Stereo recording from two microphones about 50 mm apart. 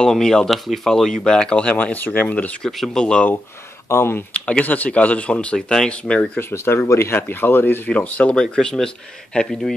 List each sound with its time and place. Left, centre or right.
0.0 s speech: centre
1.8 s speech: left
2.6 s speech: centre
3.9 s speech: left
4.3 s speech: left
6.5 s speech: left
7.2 s speech: left
7.9 s speech: left
8.5 s speech: centre